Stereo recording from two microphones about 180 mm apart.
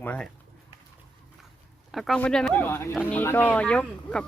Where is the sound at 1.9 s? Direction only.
Centre (ahead or behind).